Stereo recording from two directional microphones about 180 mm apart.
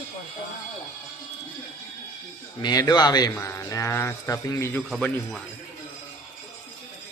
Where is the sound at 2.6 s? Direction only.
20° left (ahead or behind).